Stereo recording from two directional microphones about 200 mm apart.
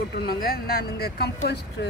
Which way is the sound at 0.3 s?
50° left (ahead or behind).